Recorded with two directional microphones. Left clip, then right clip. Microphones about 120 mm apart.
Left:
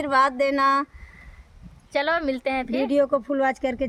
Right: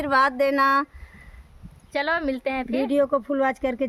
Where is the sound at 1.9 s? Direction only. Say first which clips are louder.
Left 1 dB; 5° left (ahead or behind).